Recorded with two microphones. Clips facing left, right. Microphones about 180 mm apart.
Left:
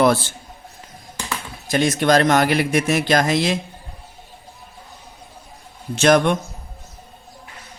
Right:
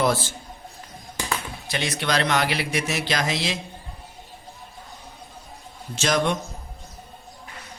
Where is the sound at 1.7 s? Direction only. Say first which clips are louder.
Left 9 dB; 45° left (ahead or behind).